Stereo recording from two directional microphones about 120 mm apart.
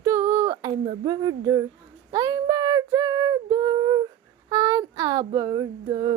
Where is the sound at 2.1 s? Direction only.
30° right (ahead or behind).